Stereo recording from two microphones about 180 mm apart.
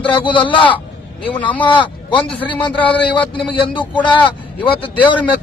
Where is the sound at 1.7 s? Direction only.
25° left (ahead or behind).